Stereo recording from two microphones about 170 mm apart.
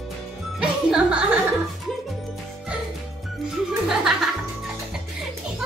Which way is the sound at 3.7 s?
5° right (ahead or behind).